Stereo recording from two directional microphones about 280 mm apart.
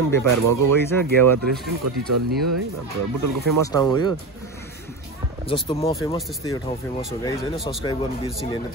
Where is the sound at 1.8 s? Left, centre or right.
Right.